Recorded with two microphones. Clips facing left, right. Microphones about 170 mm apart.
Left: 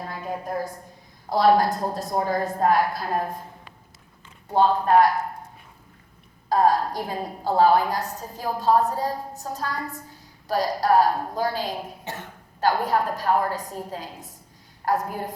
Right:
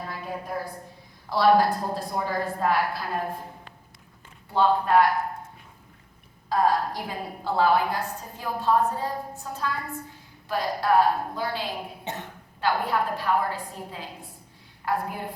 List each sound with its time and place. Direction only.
0.0 s a sound: 45° left (ahead or behind)
1.3 s a woman's voice: 45° left (ahead or behind)
4.4 s a woman's voice: 45° left (ahead or behind)
6.5 s a woman's voice: 40° left (ahead or behind)
12.0 s cough: 20° right (ahead or behind)
12.5 s a woman's voice: 40° left (ahead or behind)